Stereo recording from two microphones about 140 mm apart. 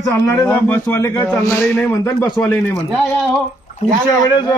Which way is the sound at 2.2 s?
30° left (ahead or behind).